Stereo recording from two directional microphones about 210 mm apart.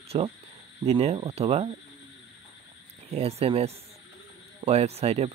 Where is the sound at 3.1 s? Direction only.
30° right (ahead or behind).